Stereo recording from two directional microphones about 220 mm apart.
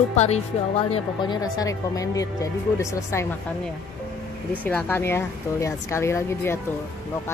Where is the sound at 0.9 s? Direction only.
20° left (ahead or behind).